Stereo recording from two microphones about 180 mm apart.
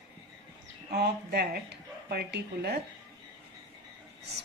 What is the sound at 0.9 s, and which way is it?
Speech, 65° right (ahead or behind).